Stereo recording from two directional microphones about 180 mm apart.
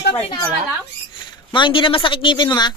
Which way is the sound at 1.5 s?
25° left (ahead or behind).